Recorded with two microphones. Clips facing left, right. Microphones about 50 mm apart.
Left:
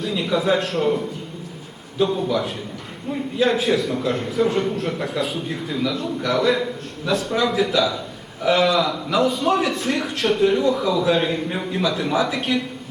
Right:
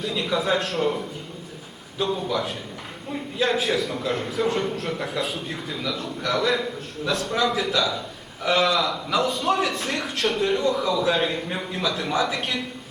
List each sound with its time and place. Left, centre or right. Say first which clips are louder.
0.0 s a man's voice: left 3 dB; centre